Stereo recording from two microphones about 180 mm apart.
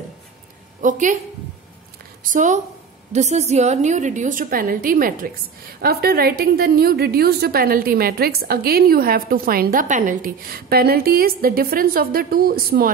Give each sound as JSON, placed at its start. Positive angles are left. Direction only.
{"t": 0.7, "sound": "a woman's voice", "side_deg": -45}
{"t": 2.3, "sound": "a woman's voice", "side_deg": -40}